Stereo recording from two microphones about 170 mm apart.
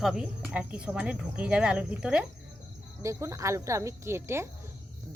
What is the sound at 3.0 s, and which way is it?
Speech, 15° right (ahead or behind).